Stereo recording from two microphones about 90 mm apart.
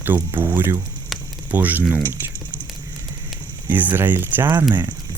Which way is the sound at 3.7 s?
20° right (ahead or behind).